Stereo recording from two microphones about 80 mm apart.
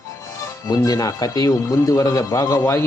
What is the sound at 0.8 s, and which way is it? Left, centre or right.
A man's voice, left.